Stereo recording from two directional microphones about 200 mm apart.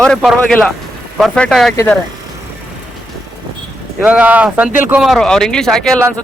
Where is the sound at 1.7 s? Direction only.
15° left (ahead or behind).